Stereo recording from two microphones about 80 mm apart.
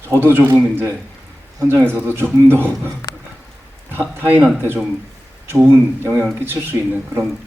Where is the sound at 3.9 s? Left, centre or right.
Right.